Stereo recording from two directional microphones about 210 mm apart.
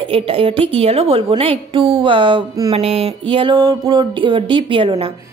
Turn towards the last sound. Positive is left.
turn(degrees=-25)  # may be behind; listen again after turning